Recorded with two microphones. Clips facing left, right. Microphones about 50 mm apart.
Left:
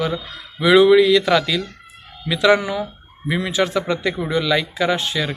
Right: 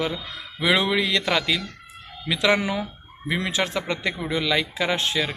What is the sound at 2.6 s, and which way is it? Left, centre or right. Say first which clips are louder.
Speech: left 2 dB; right.